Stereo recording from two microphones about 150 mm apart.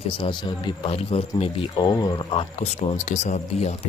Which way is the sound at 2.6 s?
40° left (ahead or behind).